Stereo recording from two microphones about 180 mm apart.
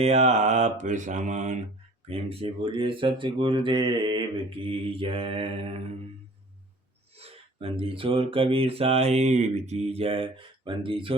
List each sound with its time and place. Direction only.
0.0 s speech: 35° right (ahead or behind)
7.2 s speech: 30° right (ahead or behind)